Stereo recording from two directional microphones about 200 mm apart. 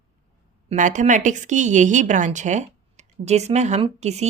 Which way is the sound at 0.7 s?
40° right (ahead or behind).